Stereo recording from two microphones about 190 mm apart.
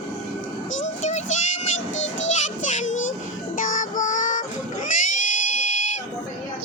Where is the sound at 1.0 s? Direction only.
40° left (ahead or behind).